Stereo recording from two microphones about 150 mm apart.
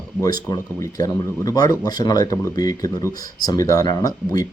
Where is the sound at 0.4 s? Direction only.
25° left (ahead or behind).